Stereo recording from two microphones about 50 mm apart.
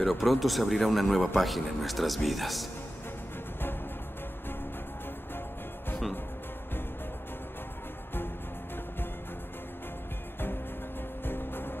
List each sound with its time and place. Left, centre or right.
0.1 s speech: centre
11.2 s music: left